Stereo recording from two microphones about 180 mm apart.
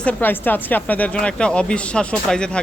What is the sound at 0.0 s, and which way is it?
Speech, 10° left (ahead or behind).